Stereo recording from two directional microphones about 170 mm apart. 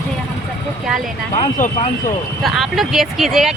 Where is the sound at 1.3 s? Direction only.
45° left (ahead or behind).